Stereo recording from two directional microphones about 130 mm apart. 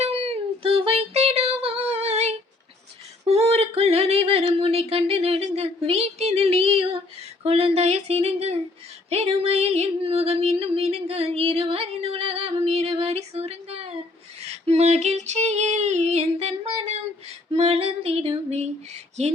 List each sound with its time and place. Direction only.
0.0 s a sound: 50° right (ahead or behind)
9.0 s music: 50° right (ahead or behind)
14.4 s female singing: 55° right (ahead or behind)